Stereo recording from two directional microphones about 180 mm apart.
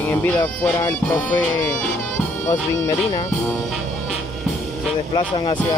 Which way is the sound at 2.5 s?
20° left (ahead or behind).